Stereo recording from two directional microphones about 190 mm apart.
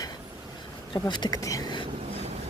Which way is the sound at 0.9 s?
25° left (ahead or behind).